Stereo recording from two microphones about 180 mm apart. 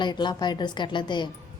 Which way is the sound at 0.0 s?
25° left (ahead or behind).